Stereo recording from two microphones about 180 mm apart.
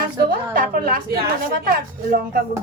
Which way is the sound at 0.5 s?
50° right (ahead or behind).